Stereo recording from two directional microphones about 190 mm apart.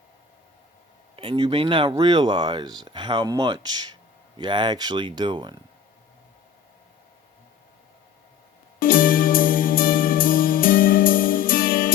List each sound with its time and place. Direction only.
1.1 s speech: 30° right (ahead or behind)
8.8 s music: 50° left (ahead or behind)